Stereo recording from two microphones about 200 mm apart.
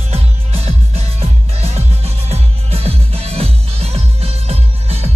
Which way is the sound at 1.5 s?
30° right (ahead or behind).